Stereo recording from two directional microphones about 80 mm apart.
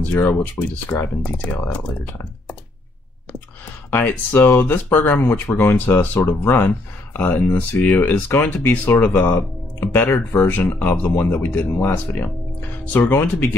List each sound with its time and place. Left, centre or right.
0.1 s speech: left
3.9 s speech: centre